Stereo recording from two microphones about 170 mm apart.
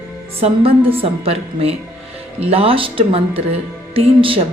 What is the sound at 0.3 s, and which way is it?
A woman's voice, 35° right (ahead or behind).